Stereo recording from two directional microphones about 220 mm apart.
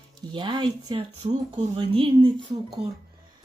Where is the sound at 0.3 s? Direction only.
20° right (ahead or behind).